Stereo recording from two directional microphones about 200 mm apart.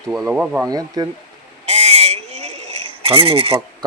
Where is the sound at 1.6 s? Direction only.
30° right (ahead or behind).